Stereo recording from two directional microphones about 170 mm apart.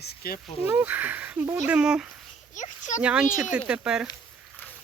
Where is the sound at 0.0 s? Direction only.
65° left (ahead or behind).